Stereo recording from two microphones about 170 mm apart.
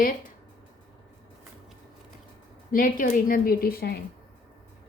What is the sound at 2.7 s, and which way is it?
A woman's voice, 55° left (ahead or behind).